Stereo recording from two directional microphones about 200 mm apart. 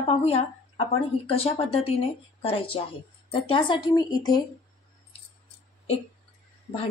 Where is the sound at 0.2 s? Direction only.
30° left (ahead or behind).